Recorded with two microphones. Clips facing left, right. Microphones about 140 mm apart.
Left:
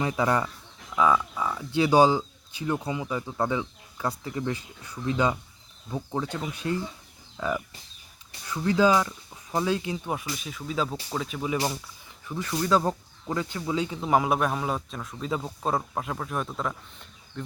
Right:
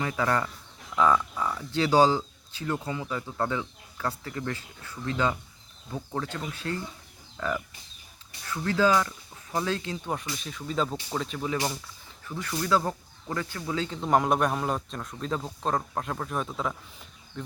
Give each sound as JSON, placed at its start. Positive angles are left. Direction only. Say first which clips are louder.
{"t": 0.0, "sound": "speech", "louder": "left 2 dB", "side_deg": 20}